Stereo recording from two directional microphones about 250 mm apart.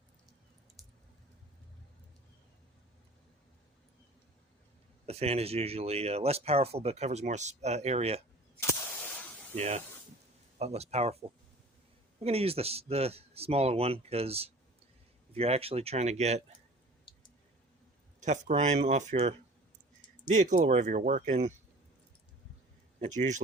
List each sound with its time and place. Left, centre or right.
0.8 s a sound: centre
5.0 s speech: right
9.6 s speech: right
18.2 s speech: right
23.0 s speech: right